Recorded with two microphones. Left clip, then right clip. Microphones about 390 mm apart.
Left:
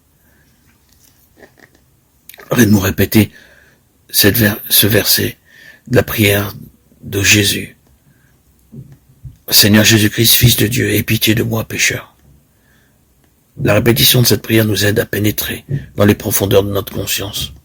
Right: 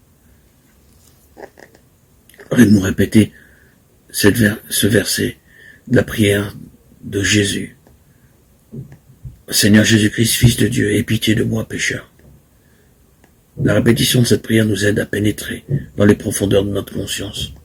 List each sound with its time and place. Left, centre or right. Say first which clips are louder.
2.5 s speech: left 1 dB; left
4.2 s speech: left 2 dB; left
9.5 s speech: left 4 dB; left
13.6 s speech: left 3 dB; left